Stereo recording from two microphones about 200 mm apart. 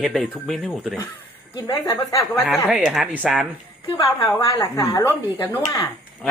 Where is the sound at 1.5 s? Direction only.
20° left (ahead or behind).